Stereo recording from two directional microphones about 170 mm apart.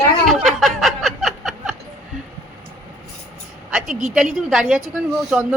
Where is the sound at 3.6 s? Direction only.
Centre (ahead or behind).